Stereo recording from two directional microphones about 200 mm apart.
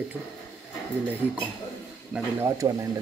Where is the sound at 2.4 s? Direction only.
15° right (ahead or behind).